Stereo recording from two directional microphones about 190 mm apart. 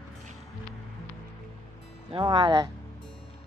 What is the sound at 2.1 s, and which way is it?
Speech, 25° right (ahead or behind).